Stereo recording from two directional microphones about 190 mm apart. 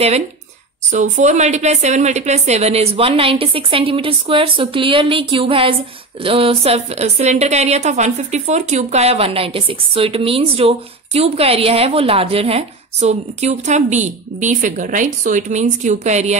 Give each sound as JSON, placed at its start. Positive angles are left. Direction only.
{"t": 0.9, "sound": "a woman's voice", "side_deg": -40}